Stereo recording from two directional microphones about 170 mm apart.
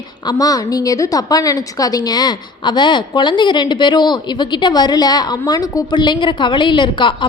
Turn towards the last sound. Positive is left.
turn(degrees=30)  # may be behind; listen again after turning